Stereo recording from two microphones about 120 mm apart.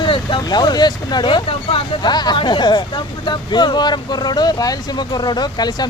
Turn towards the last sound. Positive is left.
turn(degrees=35)  # may be behind; listen again after turning